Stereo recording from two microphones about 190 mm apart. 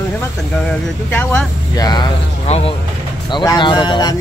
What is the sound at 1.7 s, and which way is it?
Speech, 20° left (ahead or behind).